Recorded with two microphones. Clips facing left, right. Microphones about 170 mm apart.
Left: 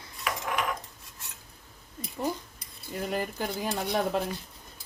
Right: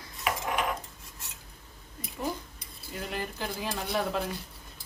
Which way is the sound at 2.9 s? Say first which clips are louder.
Left 4 dB; 40° left (ahead or behind).